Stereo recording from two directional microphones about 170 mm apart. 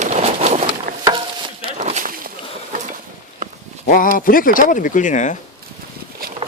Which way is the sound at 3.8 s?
55° left (ahead or behind).